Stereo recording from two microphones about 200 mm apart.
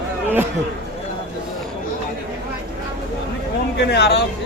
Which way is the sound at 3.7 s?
55° left (ahead or behind).